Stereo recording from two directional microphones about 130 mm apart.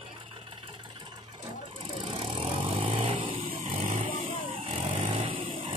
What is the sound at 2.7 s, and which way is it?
Vehicle, 45° right (ahead or behind).